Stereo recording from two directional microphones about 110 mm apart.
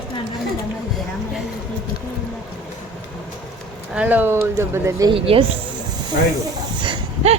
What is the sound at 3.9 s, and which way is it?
Speech, 10° right (ahead or behind).